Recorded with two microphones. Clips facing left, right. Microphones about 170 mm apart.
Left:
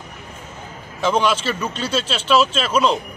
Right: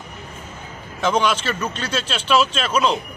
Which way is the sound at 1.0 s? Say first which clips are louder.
Left 1 dB; 5° left (ahead or behind).